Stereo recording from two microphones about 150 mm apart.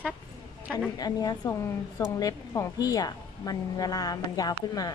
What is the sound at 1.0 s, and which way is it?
A woman's voice, 25° left (ahead or behind).